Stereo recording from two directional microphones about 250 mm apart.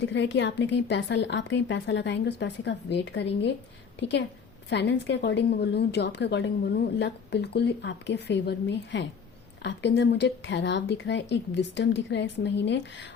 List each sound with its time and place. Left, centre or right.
0.0 s a woman's voice: left